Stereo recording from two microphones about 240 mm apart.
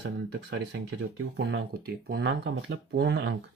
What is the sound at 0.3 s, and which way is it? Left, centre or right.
Speech, right.